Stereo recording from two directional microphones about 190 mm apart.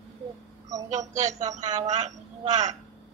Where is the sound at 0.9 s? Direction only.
40° right (ahead or behind).